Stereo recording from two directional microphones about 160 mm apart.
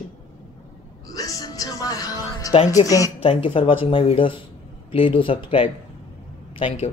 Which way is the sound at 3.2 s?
35° left (ahead or behind).